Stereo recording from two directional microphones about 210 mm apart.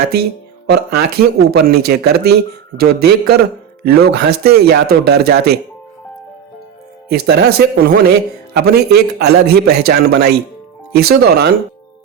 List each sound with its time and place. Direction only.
0.1 s a man's voice: 50° right (ahead or behind)
7.1 s a man's voice: 50° right (ahead or behind)